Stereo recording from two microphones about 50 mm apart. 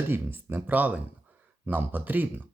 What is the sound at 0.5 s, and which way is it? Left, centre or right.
Speech, right.